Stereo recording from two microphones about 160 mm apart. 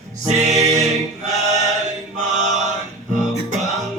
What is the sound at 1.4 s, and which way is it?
Chant, 45° right (ahead or behind).